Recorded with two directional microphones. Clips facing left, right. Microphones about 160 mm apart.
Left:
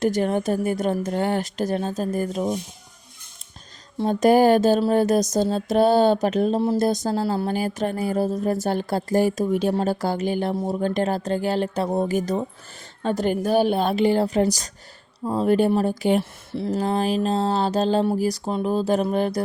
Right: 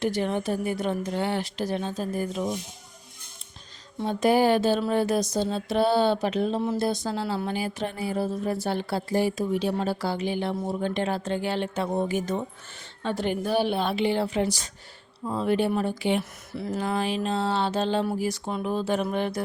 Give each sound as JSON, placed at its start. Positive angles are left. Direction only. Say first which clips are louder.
{"t": 0.0, "sound": "speech", "louder": "left 5 dB", "side_deg": 45}
{"t": 3.9, "sound": "speech", "louder": "left 5 dB", "side_deg": 45}
{"t": 16.5, "sound": "speech", "louder": "left 5 dB", "side_deg": 30}